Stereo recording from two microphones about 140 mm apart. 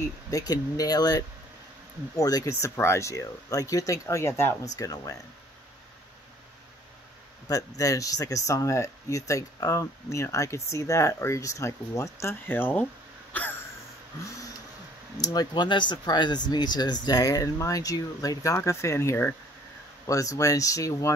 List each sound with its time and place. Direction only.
0.3 s speech: 25° left (ahead or behind)
7.4 s speech: 25° left (ahead or behind)
13.3 s a sound: 10° left (ahead or behind)
15.1 s speech: 30° left (ahead or behind)